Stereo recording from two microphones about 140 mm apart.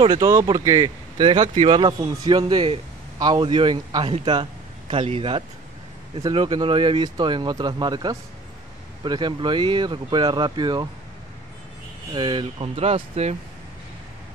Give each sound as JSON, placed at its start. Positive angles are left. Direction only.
{"t": 0.2, "sound": "speech", "side_deg": -20}
{"t": 1.1, "sound": "a man's voice", "side_deg": -40}
{"t": 12.1, "sound": "a man's voice", "side_deg": -35}